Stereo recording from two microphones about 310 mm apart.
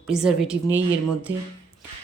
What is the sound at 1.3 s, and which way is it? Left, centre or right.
Speech, right.